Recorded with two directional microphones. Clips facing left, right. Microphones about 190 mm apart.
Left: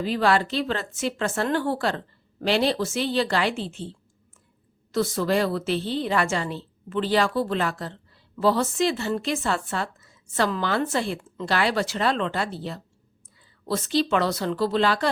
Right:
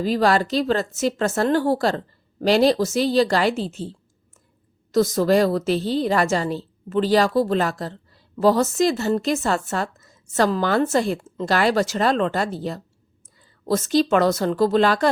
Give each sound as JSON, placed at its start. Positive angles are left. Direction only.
{"t": 0.0, "sound": "a woman's voice", "side_deg": -40}